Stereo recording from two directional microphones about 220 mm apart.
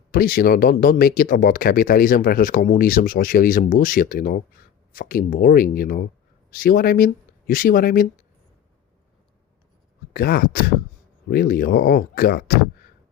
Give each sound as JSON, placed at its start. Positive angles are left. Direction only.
{"t": 0.1, "sound": "speech", "side_deg": 40}
{"t": 10.1, "sound": "speech", "side_deg": 45}